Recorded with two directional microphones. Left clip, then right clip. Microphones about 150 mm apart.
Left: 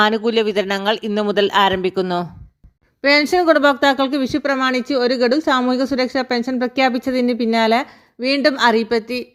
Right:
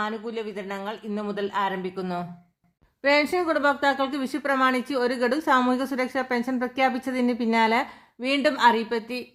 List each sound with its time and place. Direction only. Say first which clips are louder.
0.0 s speech: left 14 dB; 60° left (ahead or behind)
3.0 s a woman's voice: left 7 dB; 40° left (ahead or behind)